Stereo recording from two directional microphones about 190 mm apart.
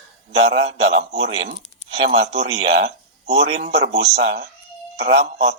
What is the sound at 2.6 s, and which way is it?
Speech, 60° right (ahead or behind).